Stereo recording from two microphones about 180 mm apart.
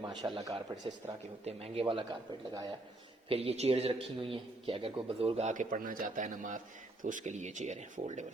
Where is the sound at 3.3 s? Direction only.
35° right (ahead or behind).